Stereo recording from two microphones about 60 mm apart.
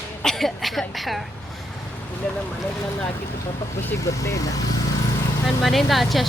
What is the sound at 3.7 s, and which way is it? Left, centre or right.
Speech, left.